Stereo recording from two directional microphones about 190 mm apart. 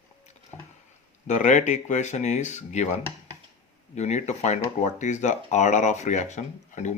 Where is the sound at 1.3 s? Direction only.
40° left (ahead or behind).